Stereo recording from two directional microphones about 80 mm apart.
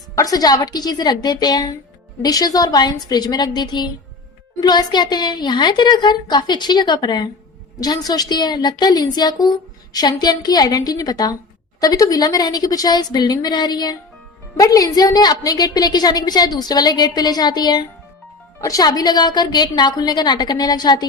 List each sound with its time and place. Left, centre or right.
0.2 s a woman's voice: left
7.8 s a woman's voice: left
14.5 s a woman's voice: left
18.6 s a woman's voice: left